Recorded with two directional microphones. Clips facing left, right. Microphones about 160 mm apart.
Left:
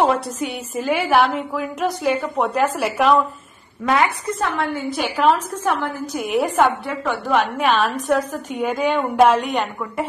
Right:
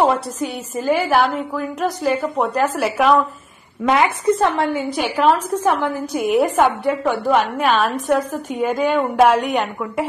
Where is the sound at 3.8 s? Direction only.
20° right (ahead or behind).